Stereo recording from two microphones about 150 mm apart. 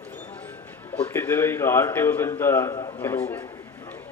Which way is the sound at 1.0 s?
15° left (ahead or behind).